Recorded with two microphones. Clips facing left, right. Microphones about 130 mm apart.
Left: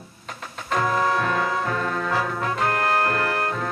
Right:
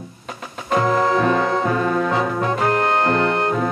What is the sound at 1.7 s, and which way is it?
Music, 10° right (ahead or behind).